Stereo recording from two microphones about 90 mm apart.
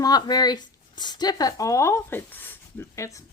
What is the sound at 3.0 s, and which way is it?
Speech, 35° left (ahead or behind).